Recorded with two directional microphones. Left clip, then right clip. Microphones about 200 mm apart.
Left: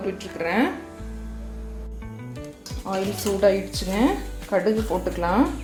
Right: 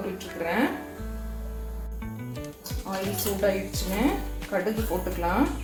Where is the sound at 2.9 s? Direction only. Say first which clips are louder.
Left 6 dB; 65° left (ahead or behind).